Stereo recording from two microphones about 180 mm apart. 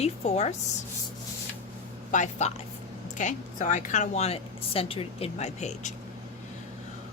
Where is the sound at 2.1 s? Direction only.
40° left (ahead or behind).